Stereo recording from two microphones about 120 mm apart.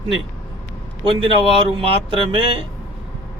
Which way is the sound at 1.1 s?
50° right (ahead or behind).